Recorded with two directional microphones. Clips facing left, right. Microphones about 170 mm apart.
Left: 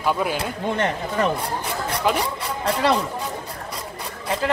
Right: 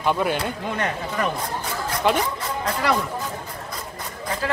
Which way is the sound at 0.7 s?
30° left (ahead or behind).